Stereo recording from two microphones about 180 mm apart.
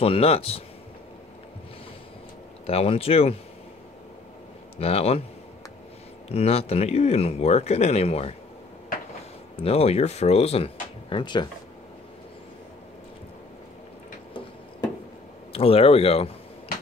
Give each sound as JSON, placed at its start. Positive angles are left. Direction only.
{"t": 0.0, "sound": "speech", "side_deg": 30}
{"t": 2.6, "sound": "speech", "side_deg": 35}
{"t": 4.7, "sound": "speech", "side_deg": 35}
{"t": 6.2, "sound": "speech", "side_deg": 35}
{"t": 9.6, "sound": "speech", "side_deg": 35}
{"t": 15.5, "sound": "speech", "side_deg": 30}